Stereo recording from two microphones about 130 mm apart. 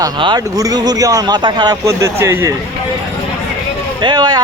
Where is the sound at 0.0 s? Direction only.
35° right (ahead or behind).